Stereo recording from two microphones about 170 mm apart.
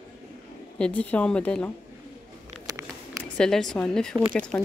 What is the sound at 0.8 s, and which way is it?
Speech, 5° left (ahead or behind).